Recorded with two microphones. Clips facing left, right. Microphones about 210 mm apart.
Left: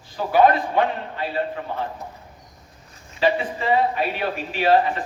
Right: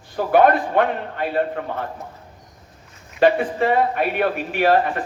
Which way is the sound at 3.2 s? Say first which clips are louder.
Right 5 dB; 55° right (ahead or behind).